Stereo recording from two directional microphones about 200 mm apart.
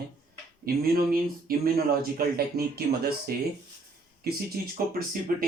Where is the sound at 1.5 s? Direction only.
50° right (ahead or behind).